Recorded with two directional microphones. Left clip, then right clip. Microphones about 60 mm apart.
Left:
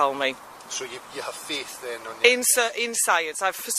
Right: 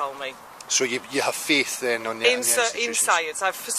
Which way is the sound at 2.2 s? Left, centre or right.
Left.